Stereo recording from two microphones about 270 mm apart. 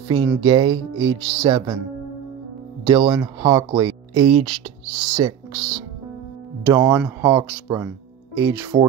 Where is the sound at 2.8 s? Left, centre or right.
Centre.